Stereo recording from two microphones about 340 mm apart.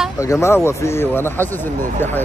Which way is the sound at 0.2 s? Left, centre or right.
Centre.